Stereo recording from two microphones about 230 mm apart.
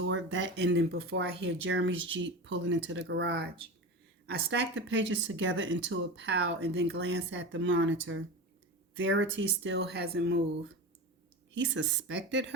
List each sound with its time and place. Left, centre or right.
0.0 s speech: right